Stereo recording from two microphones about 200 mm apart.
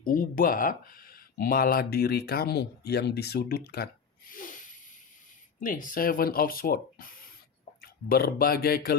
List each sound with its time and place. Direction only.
0.0 s speech: 45° left (ahead or behind)
4.3 s a sound: 40° left (ahead or behind)
5.5 s speech: 40° left (ahead or behind)